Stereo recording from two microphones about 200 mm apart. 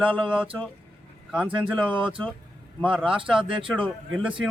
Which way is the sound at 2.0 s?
25° right (ahead or behind).